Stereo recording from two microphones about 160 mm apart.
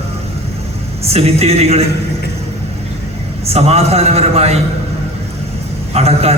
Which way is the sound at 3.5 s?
40° right (ahead or behind).